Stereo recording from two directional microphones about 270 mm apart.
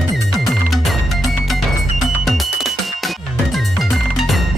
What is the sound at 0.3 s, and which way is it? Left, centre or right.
Music, centre.